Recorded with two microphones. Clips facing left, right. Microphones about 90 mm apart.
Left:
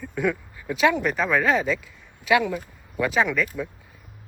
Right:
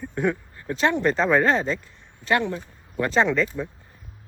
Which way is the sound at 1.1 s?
5° left (ahead or behind).